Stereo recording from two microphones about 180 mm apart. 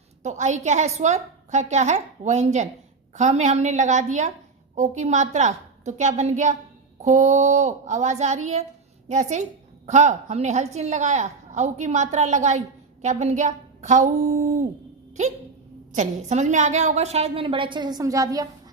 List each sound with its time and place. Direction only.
0.2 s a woman's voice: 40° right (ahead or behind)
15.9 s a woman's voice: 40° right (ahead or behind); by 18.4 s 20° right (ahead or behind)